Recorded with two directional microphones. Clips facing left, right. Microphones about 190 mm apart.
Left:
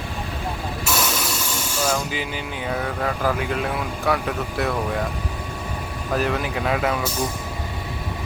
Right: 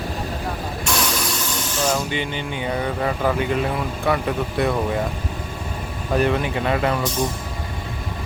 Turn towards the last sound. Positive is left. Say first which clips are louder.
# right 2 dB
turn(degrees=0)  # may be behind; listen again after turning